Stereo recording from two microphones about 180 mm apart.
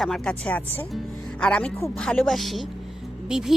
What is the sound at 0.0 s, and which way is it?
Speech, 5° left (ahead or behind).